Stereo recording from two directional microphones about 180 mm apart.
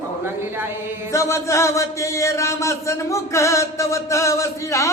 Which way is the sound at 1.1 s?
15° left (ahead or behind).